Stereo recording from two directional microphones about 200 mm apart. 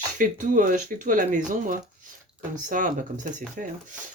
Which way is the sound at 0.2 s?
40° right (ahead or behind).